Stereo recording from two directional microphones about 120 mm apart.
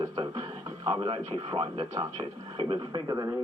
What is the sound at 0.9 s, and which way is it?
Speech, 45° right (ahead or behind).